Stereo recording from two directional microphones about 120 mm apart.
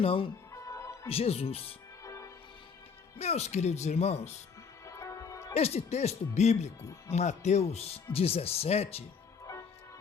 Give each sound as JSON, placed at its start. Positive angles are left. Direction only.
{"t": 0.0, "sound": "speech", "side_deg": 50}
{"t": 0.5, "sound": "music", "side_deg": 25}
{"t": 1.0, "sound": "speech", "side_deg": 55}
{"t": 2.0, "sound": "music", "side_deg": 25}
{"t": 3.2, "sound": "speech", "side_deg": 65}
{"t": 4.9, "sound": "music", "side_deg": 25}
{"t": 5.5, "sound": "speech", "side_deg": 65}
{"t": 7.7, "sound": "speech", "side_deg": 60}